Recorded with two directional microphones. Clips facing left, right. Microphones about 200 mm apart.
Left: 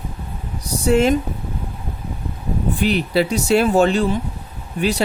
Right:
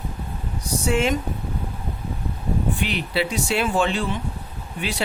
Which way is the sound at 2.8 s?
40° left (ahead or behind).